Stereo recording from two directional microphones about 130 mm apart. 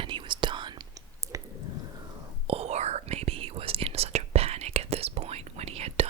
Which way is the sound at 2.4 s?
50° right (ahead or behind).